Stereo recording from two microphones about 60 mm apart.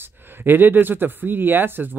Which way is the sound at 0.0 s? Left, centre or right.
Right.